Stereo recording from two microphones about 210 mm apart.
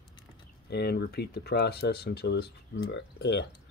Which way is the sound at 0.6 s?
50° left (ahead or behind).